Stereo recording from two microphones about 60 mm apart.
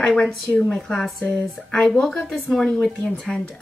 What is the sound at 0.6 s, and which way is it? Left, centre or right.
Speech, centre.